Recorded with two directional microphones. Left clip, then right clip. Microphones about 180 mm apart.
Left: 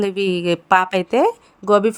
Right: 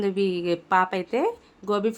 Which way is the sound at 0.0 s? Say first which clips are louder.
Left 5 dB; 40° left (ahead or behind).